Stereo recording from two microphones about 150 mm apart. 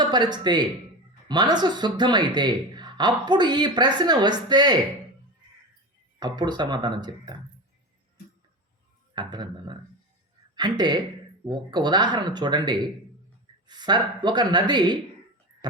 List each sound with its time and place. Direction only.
0.0 s speech: 30° right (ahead or behind)
6.1 s speech: 30° right (ahead or behind)
9.1 s a woman's voice: 30° right (ahead or behind)